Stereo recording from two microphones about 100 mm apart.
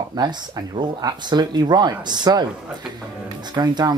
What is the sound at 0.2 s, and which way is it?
Speech, 45° right (ahead or behind).